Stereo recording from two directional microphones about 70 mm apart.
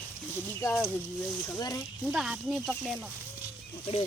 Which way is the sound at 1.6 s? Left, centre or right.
Left.